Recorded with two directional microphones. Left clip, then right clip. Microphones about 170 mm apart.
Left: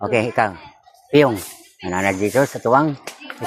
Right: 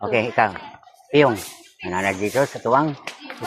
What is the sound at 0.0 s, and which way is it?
Speech, 90° left.